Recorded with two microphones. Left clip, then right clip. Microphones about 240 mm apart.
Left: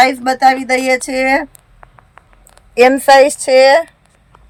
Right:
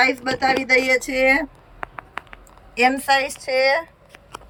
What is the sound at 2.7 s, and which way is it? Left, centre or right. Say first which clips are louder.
Speech: left 10 dB; left.